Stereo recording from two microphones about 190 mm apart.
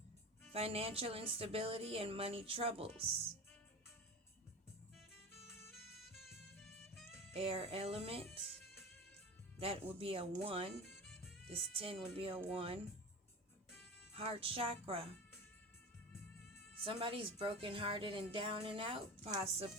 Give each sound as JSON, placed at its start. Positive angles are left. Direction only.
{"t": 0.5, "sound": "speech", "side_deg": -30}
{"t": 5.5, "sound": "music", "side_deg": 10}
{"t": 5.7, "sound": "music", "side_deg": 0}
{"t": 7.3, "sound": "speech", "side_deg": -30}
{"t": 9.6, "sound": "speech", "side_deg": -30}
{"t": 10.8, "sound": "music", "side_deg": 5}
{"t": 11.4, "sound": "speech", "side_deg": -30}
{"t": 14.2, "sound": "speech", "side_deg": -30}
{"t": 16.8, "sound": "speech", "side_deg": -25}